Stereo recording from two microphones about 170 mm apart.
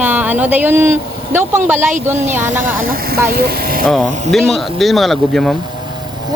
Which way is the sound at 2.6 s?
55° right (ahead or behind).